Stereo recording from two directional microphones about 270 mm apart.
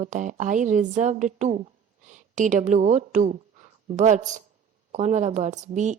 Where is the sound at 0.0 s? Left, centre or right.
Right.